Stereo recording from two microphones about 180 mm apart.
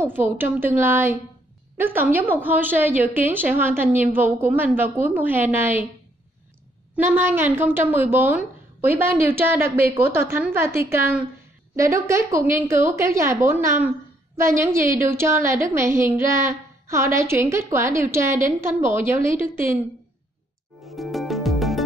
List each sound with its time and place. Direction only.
0.0 s a woman's voice: 10° right (ahead or behind)
7.0 s a woman's voice: 10° right (ahead or behind)
20.8 s music: centre (ahead or behind)